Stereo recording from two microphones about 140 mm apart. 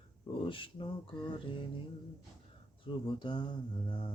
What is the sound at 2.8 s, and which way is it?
Mantra, 35° left (ahead or behind).